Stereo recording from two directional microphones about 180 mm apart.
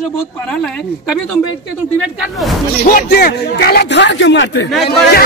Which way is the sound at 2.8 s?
55° left (ahead or behind).